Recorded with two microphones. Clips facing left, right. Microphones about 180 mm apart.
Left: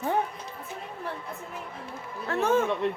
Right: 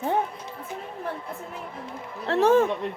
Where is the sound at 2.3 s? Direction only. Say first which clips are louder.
Right 5 dB; 35° right (ahead or behind).